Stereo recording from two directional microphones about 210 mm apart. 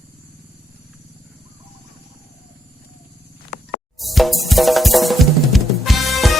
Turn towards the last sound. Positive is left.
turn(degrees=0)  # may be behind; listen again after turning